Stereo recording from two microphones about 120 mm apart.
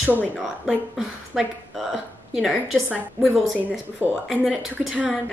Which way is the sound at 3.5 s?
15° right (ahead or behind).